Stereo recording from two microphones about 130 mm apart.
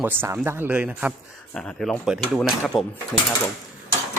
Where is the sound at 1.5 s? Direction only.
5° left (ahead or behind).